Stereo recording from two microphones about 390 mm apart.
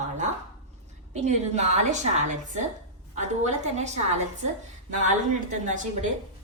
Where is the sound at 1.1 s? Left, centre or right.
Centre.